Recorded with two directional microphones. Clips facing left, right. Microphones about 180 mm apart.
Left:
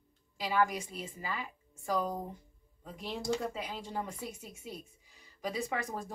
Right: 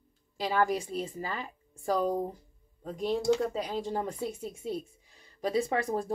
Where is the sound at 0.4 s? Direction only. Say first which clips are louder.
Right 3 dB; 35° right (ahead or behind).